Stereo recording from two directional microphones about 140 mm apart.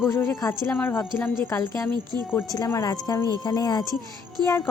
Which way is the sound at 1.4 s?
20° left (ahead or behind).